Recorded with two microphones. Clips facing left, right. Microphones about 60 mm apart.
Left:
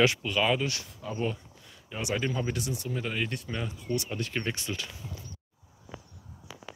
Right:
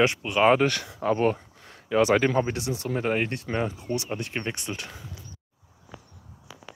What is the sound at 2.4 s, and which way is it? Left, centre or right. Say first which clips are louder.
Speech: right 4 dB; right.